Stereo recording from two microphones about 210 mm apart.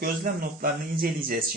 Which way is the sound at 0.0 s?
45° right (ahead or behind).